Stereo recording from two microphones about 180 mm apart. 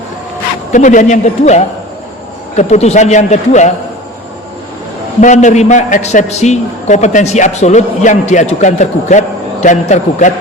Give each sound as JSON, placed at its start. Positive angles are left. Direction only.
{"t": 0.7, "sound": "a man's voice", "side_deg": 45}
{"t": 5.2, "sound": "a man's voice", "side_deg": 45}